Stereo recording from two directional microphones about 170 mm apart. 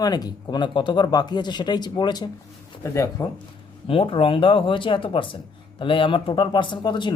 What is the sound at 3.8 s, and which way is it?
Speech, 35° left (ahead or behind).